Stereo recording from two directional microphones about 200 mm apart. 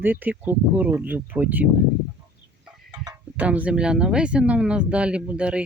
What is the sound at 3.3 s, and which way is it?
Speech, 5° right (ahead or behind).